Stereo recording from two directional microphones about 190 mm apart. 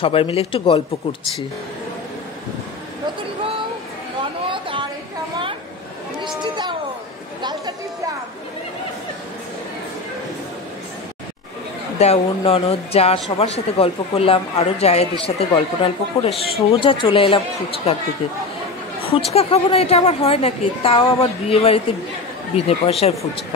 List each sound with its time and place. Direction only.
0.0 s a man's voice: 30° left (ahead or behind)
4.5 s a sound: 25° right (ahead or behind)
6.2 s speech: 25° right (ahead or behind)
12.0 s speech: 30° left (ahead or behind)
19.0 s speech: 30° left (ahead or behind)